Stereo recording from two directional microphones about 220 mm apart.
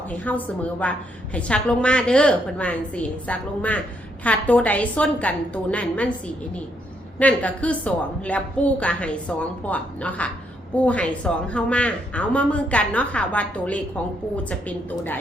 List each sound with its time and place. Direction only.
0.1 s a woman's voice: 5° left (ahead or behind)